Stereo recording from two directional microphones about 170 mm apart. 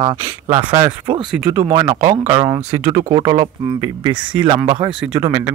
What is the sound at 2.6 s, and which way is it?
Speech, 35° right (ahead or behind).